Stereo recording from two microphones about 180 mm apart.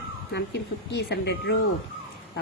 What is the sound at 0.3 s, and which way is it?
A woman's voice, 65° left (ahead or behind).